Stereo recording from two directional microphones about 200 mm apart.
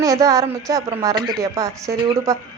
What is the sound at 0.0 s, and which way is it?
Speech, 15° right (ahead or behind).